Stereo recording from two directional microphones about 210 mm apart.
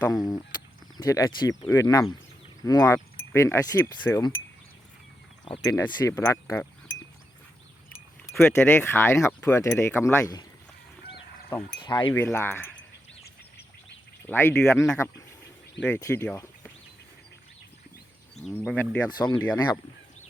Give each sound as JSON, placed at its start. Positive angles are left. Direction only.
{"t": 0.0, "sound": "speech", "side_deg": 20}
{"t": 5.5, "sound": "speech", "side_deg": 15}
{"t": 8.3, "sound": "speech", "side_deg": 10}
{"t": 11.8, "sound": "speech", "side_deg": 20}
{"t": 14.2, "sound": "speech", "side_deg": 10}
{"t": 19.1, "sound": "speech", "side_deg": 20}